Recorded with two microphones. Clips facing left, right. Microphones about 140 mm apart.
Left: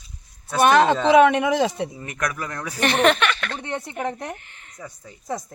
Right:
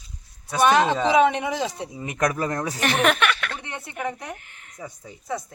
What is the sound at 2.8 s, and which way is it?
Speech, 5° right (ahead or behind).